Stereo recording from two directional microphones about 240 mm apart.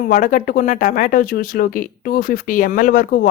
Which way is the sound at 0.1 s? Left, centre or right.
Left.